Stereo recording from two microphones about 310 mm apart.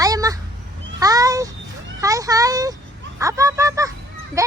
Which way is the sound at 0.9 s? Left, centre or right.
Centre.